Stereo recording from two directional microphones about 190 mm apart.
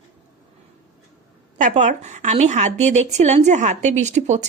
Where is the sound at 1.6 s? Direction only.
40° right (ahead or behind).